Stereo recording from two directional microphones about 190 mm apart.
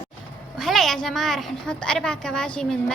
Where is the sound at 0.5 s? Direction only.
Centre (ahead or behind).